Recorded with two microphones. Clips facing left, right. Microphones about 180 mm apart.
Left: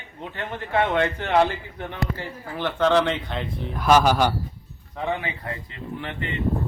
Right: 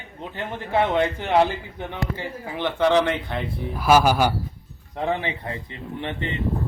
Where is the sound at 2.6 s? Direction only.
10° right (ahead or behind).